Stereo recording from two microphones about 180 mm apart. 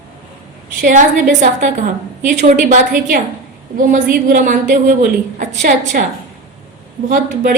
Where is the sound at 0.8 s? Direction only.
45° right (ahead or behind).